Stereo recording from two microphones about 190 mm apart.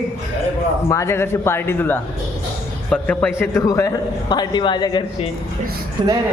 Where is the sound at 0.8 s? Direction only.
15° left (ahead or behind).